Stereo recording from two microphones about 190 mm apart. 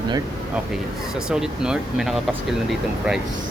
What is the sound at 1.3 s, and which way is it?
Speech, 5° right (ahead or behind).